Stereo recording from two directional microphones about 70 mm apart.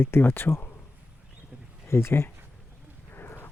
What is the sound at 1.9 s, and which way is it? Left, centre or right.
Speech, left.